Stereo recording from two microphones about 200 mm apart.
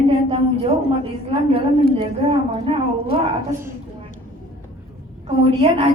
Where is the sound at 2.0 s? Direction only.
30° right (ahead or behind).